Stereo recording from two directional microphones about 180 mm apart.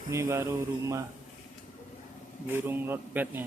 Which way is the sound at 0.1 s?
15° right (ahead or behind).